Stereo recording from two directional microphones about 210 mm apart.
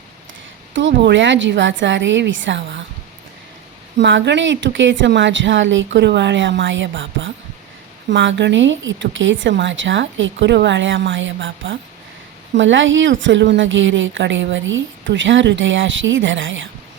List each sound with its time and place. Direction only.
0.7 s speech: 60° right (ahead or behind)
3.9 s speech: 60° right (ahead or behind)